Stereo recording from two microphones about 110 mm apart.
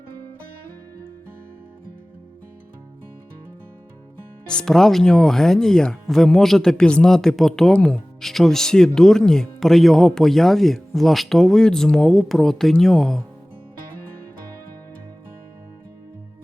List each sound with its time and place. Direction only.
4.4 s speech: 5° left (ahead or behind)